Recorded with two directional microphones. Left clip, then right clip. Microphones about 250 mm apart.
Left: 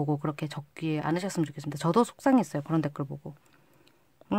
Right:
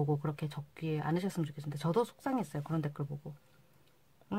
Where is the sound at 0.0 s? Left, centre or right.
Left.